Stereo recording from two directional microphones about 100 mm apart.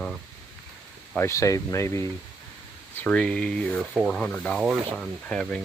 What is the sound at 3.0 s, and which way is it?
Speech, 10° left (ahead or behind).